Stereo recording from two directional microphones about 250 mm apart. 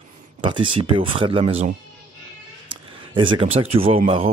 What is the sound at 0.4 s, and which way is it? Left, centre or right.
Speech, centre.